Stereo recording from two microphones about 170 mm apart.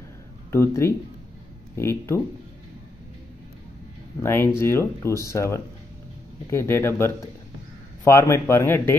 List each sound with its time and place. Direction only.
0.5 s speech: 15° left (ahead or behind)
4.2 s speech: 15° left (ahead or behind)